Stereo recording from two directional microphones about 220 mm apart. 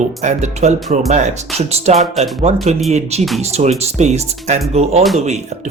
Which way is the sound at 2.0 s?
Centre (ahead or behind).